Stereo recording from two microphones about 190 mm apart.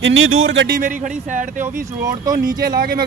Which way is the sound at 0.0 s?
85° right.